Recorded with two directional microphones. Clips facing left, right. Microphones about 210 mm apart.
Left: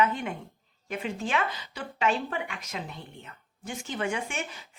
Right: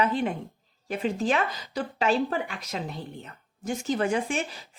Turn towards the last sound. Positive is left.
turn(degrees=-35)  # may be behind; listen again after turning